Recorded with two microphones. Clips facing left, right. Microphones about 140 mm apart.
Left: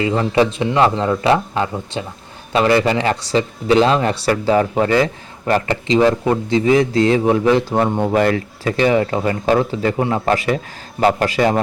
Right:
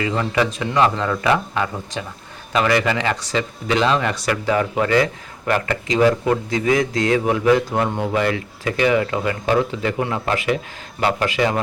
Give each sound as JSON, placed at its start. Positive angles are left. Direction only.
{"t": 0.0, "sound": "speech", "side_deg": 25}
{"t": 8.1, "sound": "speech", "side_deg": 45}
{"t": 8.6, "sound": "speech", "side_deg": 35}